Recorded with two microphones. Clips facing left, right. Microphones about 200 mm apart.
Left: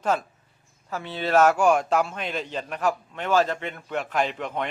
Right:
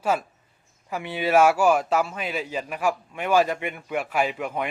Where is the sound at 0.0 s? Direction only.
5° right (ahead or behind).